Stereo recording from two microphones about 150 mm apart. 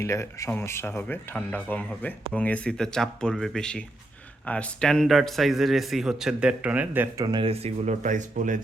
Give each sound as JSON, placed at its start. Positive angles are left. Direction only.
{"t": 0.0, "sound": "speech", "side_deg": 20}
{"t": 7.3, "sound": "speech", "side_deg": -35}